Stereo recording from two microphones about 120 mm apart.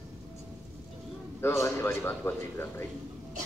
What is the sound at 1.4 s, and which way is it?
A man's voice, 20° left (ahead or behind).